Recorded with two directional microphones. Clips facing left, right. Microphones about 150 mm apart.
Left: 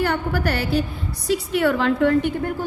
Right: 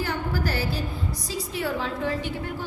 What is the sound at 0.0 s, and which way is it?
A woman's voice, 65° left (ahead or behind).